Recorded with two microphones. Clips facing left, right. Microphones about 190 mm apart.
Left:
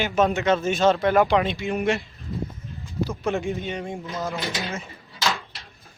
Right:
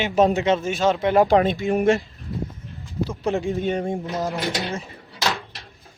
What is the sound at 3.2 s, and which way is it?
Speech, 35° right (ahead or behind).